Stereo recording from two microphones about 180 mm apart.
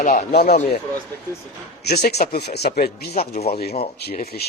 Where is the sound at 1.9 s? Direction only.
40° left (ahead or behind).